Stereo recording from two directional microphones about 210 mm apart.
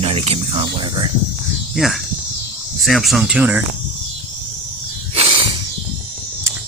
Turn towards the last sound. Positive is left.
turn(degrees=-25)  # may be behind; listen again after turning